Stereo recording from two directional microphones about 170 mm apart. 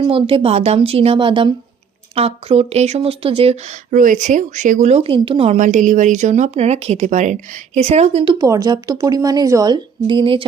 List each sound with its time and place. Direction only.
0.0 s speech: 30° right (ahead or behind)
3.9 s speech: 50° right (ahead or behind)
8.4 s a woman's voice: 20° right (ahead or behind)